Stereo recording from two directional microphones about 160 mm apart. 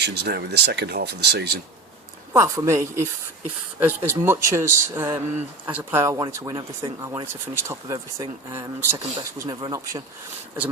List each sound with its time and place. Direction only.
0.0 s speech: 90° right
2.3 s speech: 20° right (ahead or behind)
9.4 s speech: 25° right (ahead or behind)